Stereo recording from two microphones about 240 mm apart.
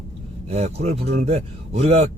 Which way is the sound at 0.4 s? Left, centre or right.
Right.